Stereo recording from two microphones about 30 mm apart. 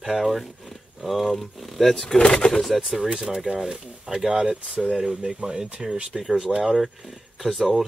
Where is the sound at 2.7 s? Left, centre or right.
Centre.